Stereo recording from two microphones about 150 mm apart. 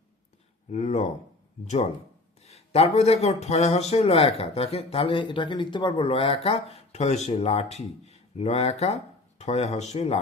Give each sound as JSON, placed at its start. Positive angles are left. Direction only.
{"t": 0.7, "sound": "speech", "side_deg": 50}